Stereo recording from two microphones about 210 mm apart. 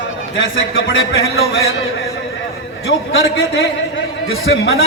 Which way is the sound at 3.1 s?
65° left (ahead or behind).